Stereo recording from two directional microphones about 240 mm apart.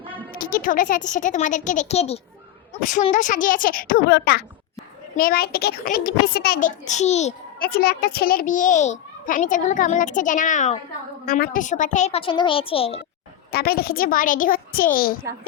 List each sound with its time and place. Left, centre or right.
0.3 s a child's voice: left
13.5 s a child's voice: left